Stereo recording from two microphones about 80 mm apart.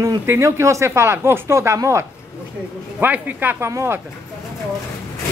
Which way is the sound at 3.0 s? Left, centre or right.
Right.